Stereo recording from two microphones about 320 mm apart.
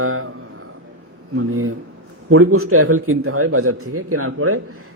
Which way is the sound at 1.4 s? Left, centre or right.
Right.